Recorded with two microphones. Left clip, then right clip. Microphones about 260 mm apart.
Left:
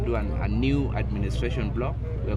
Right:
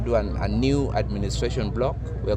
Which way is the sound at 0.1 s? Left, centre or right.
Right.